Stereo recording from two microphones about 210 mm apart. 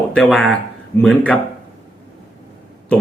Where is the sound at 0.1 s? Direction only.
5° left (ahead or behind).